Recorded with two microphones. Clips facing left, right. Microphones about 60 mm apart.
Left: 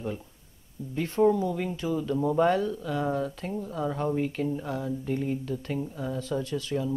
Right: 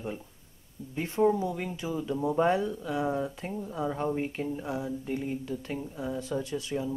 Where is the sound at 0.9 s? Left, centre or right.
Centre.